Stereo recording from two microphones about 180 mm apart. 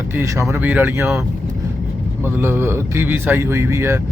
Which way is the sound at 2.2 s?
10° right (ahead or behind).